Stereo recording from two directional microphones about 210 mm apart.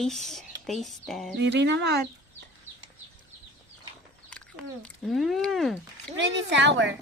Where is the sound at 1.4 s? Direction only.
55° right (ahead or behind).